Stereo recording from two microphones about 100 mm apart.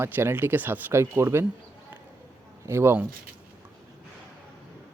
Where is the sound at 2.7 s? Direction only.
25° right (ahead or behind).